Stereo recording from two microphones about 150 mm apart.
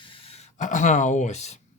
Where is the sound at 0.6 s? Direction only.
55° left (ahead or behind).